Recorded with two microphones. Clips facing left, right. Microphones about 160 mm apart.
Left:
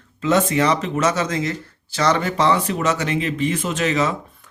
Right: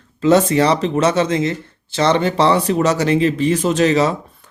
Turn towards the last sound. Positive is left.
turn(degrees=-35)  # may be behind; listen again after turning